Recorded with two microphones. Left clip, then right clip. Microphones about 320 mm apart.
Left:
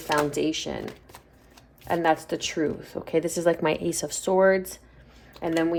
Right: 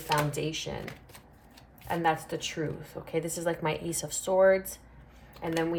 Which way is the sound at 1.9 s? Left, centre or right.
Left.